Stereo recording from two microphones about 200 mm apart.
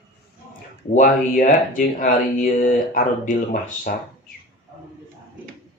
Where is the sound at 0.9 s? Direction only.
45° left (ahead or behind).